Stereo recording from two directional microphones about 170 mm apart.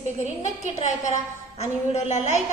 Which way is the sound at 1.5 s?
40° left (ahead or behind).